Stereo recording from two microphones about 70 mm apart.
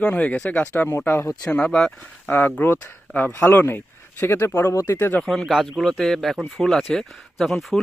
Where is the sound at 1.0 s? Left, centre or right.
Left.